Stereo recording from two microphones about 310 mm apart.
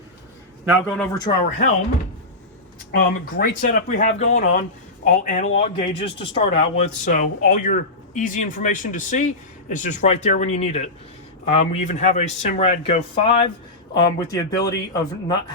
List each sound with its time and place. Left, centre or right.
0.6 s a man's voice: centre
2.9 s speech: left; by 15.4 s centre